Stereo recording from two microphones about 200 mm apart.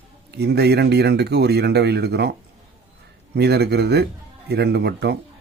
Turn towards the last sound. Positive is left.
turn(degrees=-55)  # may be behind; listen again after turning